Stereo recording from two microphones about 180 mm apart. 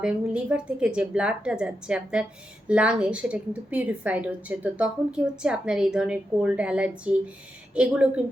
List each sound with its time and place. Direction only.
0.0 s a woman's voice: 5° right (ahead or behind)